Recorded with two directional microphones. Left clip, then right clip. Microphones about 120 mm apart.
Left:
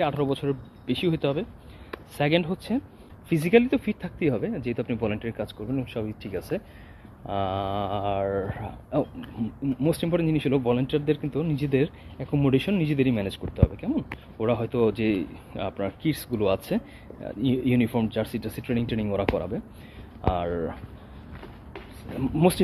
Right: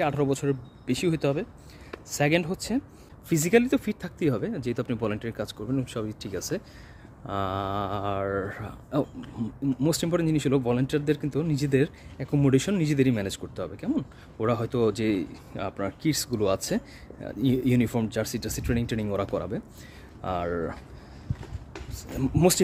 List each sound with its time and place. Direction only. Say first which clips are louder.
0.0 s speech: even; 45° right (ahead or behind)
22.2 s speech: even; 45° right (ahead or behind)